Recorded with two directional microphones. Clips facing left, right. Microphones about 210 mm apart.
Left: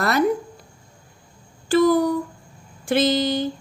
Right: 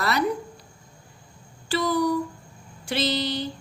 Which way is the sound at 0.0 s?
50° left (ahead or behind).